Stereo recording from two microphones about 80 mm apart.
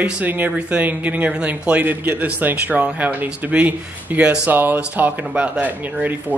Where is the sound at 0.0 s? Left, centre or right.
Centre.